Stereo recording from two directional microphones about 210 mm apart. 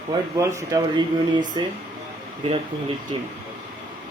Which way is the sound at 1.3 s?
20° right (ahead or behind).